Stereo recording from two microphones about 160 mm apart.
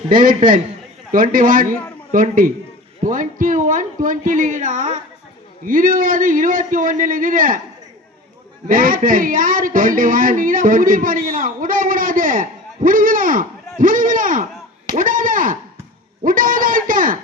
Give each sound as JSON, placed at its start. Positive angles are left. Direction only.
{"t": 0.1, "sound": "speech", "side_deg": -60}
{"t": 8.6, "sound": "speech", "side_deg": -60}